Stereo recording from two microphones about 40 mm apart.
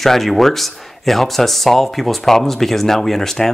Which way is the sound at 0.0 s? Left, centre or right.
Centre.